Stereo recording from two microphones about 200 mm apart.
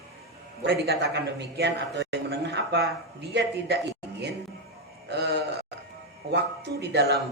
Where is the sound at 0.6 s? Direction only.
55° right (ahead or behind).